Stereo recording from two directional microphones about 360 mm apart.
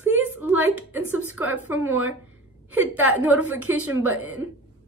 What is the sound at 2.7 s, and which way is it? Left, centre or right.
A woman's voice, centre.